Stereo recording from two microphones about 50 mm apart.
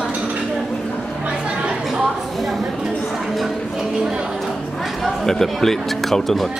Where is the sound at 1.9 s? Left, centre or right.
Centre.